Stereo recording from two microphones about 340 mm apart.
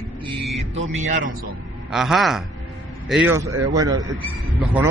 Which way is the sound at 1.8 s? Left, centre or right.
Centre.